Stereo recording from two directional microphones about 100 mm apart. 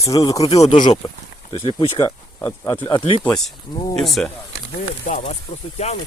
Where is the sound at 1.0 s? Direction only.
65° left (ahead or behind).